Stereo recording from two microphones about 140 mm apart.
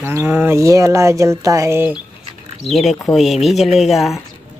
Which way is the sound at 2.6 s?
Centre (ahead or behind).